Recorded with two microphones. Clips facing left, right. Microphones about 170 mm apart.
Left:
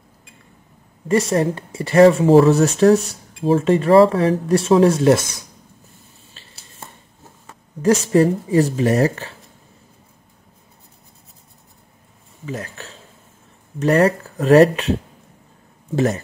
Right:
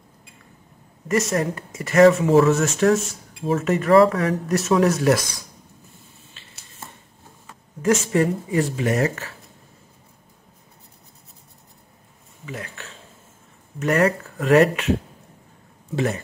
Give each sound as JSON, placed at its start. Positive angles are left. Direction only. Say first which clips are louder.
{"t": 1.0, "sound": "speech", "louder": "left 4 dB", "side_deg": 30}
{"t": 7.8, "sound": "speech", "louder": "left 5 dB", "side_deg": 35}
{"t": 12.4, "sound": "speech", "louder": "left 5 dB", "side_deg": 35}